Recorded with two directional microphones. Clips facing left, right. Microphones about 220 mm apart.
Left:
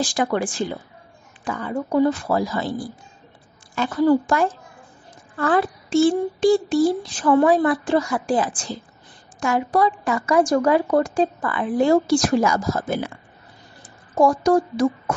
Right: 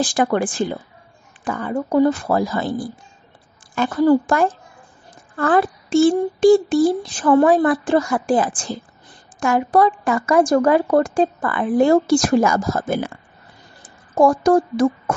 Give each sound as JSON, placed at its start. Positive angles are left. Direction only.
{"t": 0.0, "sound": "a woman's voice", "side_deg": -50}
{"t": 3.7, "sound": "a woman's voice", "side_deg": -50}